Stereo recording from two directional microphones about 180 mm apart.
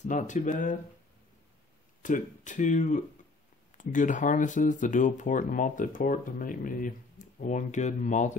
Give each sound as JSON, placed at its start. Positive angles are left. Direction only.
{"t": 0.1, "sound": "speech", "side_deg": 45}
{"t": 2.0, "sound": "speech", "side_deg": 45}